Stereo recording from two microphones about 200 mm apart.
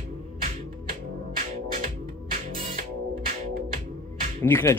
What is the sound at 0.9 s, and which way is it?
Music, 45° right (ahead or behind).